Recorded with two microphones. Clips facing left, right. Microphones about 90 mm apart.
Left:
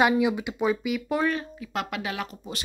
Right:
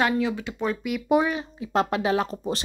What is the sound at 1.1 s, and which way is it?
Speech, 15° right (ahead or behind).